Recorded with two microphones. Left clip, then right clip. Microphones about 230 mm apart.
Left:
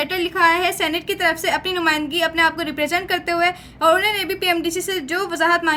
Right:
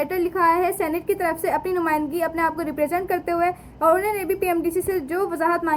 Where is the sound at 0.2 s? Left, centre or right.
Left.